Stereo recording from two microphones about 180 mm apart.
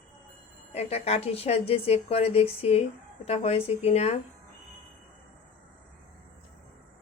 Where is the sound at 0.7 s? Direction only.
35° left (ahead or behind).